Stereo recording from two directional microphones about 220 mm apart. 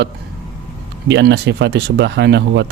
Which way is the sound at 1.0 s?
50° right (ahead or behind).